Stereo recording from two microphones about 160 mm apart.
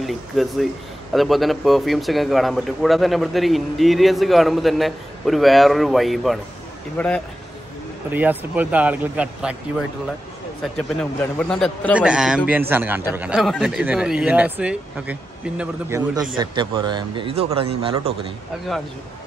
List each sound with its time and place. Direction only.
0.0 s speech: centre (ahead or behind)
7.0 s speech: 10° left (ahead or behind)
8.1 s speech: 10° right (ahead or behind)
10.6 s speech: 5° left (ahead or behind)
15.9 s speech: 20° right (ahead or behind)